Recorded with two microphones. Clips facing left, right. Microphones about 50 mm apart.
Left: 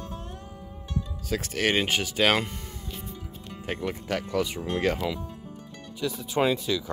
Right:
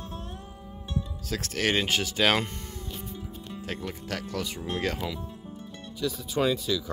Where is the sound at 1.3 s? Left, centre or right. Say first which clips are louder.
Left 2 dB; centre.